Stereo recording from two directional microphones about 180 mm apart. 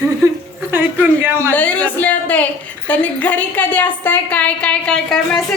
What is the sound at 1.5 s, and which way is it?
A woman's voice, 10° left (ahead or behind).